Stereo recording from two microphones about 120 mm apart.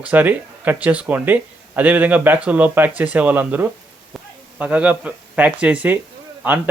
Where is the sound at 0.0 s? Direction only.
15° right (ahead or behind).